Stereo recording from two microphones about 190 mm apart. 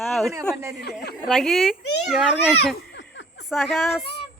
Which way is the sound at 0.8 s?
55° left (ahead or behind).